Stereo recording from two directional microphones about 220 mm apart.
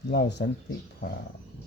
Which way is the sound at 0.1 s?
50° left (ahead or behind).